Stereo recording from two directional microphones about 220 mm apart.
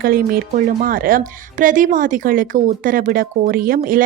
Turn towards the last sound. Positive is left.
turn(degrees=-40)  # may be behind; listen again after turning